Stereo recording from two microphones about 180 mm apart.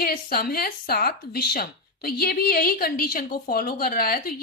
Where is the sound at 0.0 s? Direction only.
55° left (ahead or behind).